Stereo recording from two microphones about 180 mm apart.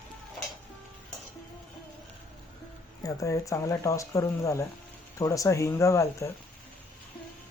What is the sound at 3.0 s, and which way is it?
Speech, 20° left (ahead or behind).